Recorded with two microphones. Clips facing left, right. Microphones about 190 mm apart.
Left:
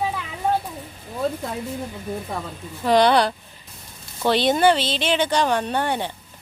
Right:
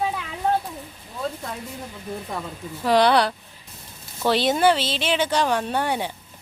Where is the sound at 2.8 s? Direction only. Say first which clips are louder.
Left 1 dB; centre (ahead or behind).